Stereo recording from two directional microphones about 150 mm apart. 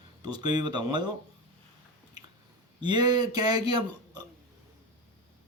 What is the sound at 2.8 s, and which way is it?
A man's voice, 30° right (ahead or behind).